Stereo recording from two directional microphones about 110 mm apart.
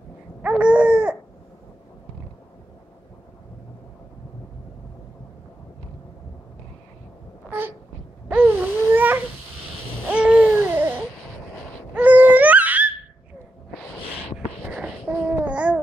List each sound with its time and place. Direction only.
0.4 s babbling: 10° right (ahead or behind)
7.4 s a sound: 20° right (ahead or behind)
10.0 s babbling: 10° right (ahead or behind)
14.3 s babbling: 5° right (ahead or behind)